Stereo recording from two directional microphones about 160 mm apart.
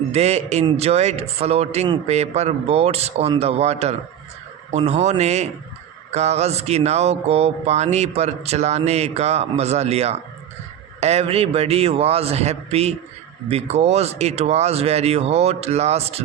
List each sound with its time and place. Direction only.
0.1 s speech: 40° right (ahead or behind)
4.9 s a sound: 45° right (ahead or behind)
11.0 s speech: 40° right (ahead or behind)